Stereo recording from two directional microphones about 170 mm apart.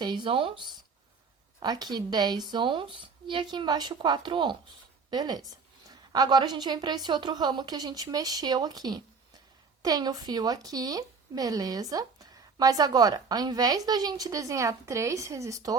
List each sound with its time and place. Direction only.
0.0 s speech: 25° right (ahead or behind)